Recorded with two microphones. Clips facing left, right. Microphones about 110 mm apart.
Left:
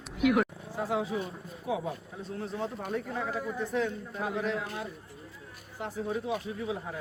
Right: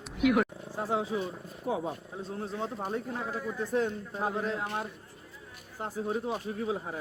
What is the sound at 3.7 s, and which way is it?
Speech, 35° right (ahead or behind).